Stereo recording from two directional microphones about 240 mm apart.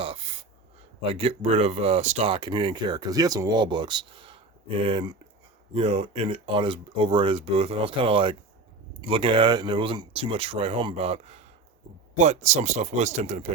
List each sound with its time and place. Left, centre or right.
1.1 s speech: right